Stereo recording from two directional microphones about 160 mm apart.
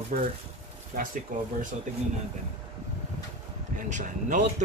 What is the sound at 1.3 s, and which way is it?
Speech, 55° right (ahead or behind).